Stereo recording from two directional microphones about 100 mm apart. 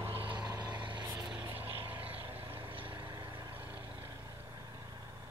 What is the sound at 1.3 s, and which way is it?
Vehicle, 20° right (ahead or behind).